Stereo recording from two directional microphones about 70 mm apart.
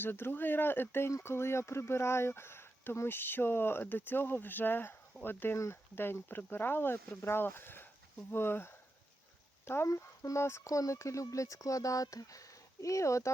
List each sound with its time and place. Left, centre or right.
0.0 s speech: left
9.9 s speech: left
10.7 s speech: left